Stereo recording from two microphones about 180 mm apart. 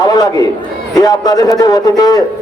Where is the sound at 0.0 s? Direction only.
20° left (ahead or behind).